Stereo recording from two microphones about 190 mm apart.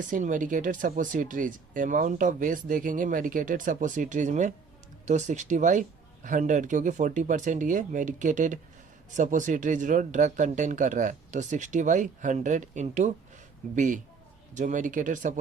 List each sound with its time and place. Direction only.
0.1 s speech: 45° right (ahead or behind)